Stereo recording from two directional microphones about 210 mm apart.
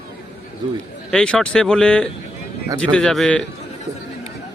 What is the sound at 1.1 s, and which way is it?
Speech, 5° left (ahead or behind).